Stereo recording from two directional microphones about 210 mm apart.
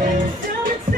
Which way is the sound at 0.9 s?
35° right (ahead or behind).